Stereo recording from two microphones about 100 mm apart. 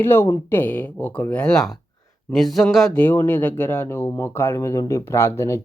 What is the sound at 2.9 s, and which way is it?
Speech, 20° left (ahead or behind).